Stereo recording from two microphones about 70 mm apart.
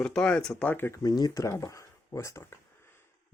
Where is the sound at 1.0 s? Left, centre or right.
Left.